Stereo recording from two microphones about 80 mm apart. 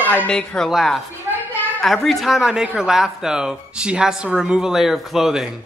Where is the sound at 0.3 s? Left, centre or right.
Centre.